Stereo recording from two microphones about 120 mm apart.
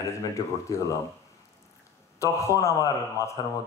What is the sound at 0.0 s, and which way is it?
Speech, 25° left (ahead or behind).